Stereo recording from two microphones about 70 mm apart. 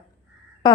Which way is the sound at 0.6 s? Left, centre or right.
Left.